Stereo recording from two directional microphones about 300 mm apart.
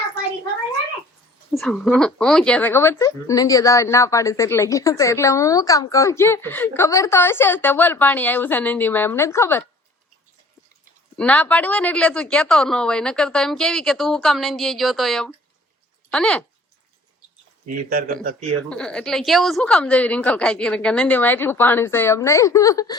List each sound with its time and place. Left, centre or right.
1.5 s speech: centre
11.2 s a woman's voice: centre
17.9 s speech: right
18.7 s a woman's voice: centre